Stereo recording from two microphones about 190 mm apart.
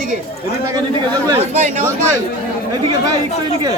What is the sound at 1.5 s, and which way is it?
Speech, 40° right (ahead or behind).